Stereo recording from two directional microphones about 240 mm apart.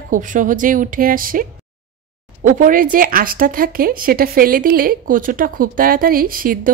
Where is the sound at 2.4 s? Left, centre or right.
Right.